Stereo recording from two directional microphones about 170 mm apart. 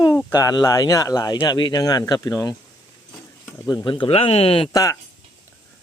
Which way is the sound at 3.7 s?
25° left (ahead or behind).